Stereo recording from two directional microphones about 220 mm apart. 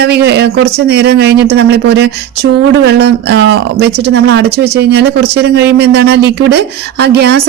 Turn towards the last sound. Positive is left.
turn(degrees=-50)  # may be behind; listen again after turning